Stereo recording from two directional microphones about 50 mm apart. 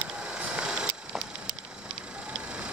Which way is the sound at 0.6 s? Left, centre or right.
Centre.